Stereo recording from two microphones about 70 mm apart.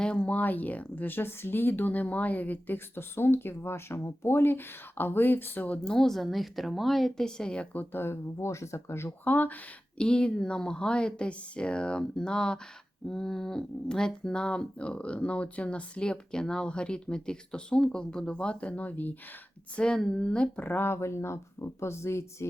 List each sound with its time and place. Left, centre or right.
0.0 s speech: centre
5.8 s speech: centre; by 9.0 s left
9.2 s speech: left
10.0 s speech: centre
19.7 s speech: centre
20.6 s speech: left